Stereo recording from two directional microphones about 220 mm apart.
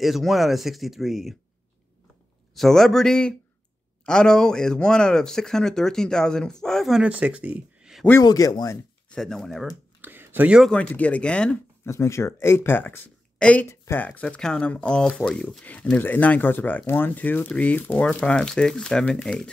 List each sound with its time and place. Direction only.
0.0 s speech: centre (ahead or behind)
2.5 s speech: centre (ahead or behind)
8.1 s a man's voice: 15° left (ahead or behind)
9.1 s speech: centre (ahead or behind)
9.7 s speech: 10° right (ahead or behind)